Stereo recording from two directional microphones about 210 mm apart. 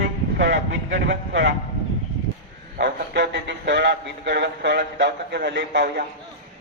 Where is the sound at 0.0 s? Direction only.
55° right (ahead or behind).